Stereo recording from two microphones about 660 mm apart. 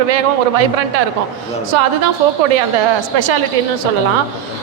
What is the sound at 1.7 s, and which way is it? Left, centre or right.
Speech, right.